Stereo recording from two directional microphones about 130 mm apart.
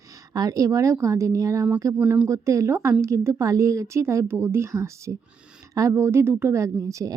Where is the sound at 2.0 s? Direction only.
10° right (ahead or behind).